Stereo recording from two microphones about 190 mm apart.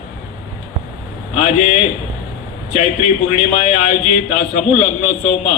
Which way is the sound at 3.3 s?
35° left (ahead or behind).